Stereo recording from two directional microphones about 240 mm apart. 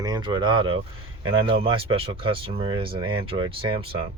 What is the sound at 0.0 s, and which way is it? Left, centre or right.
Speech, centre.